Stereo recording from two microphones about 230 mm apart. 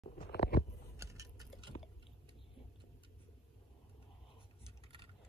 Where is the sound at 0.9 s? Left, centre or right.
Centre.